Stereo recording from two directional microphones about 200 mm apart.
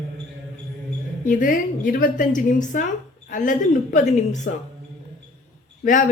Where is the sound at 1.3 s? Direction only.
40° left (ahead or behind).